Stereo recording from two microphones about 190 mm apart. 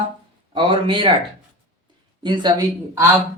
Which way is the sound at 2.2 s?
25° right (ahead or behind).